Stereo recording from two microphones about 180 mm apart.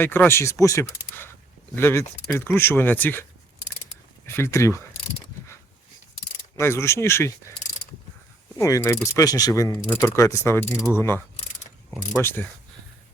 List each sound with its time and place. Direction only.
0.0 s speech: 10° left (ahead or behind)
4.3 s speech: 15° left (ahead or behind)
6.6 s speech: 15° left (ahead or behind)
8.5 s speech: 15° left (ahead or behind)
12.2 s speech: 10° left (ahead or behind)